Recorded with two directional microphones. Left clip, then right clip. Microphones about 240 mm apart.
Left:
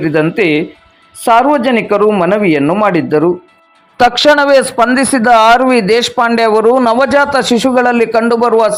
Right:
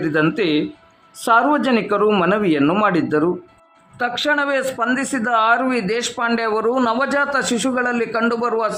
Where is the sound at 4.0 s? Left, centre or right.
Left.